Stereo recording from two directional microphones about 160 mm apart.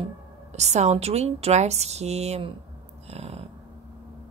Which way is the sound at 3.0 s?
40° right (ahead or behind).